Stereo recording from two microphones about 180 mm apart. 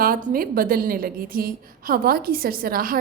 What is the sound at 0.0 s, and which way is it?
A woman's voice, 50° right (ahead or behind).